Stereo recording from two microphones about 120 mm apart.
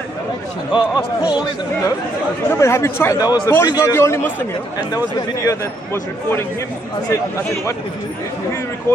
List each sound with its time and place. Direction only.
0.7 s speech: 40° left (ahead or behind)
2.5 s speech: 25° left (ahead or behind)
3.2 s speech: 35° left (ahead or behind)
8.9 s speech: 20° left (ahead or behind)